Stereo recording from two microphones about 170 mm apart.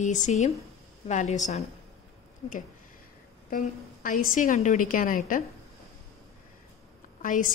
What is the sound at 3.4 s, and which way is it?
Speech, 55° left (ahead or behind).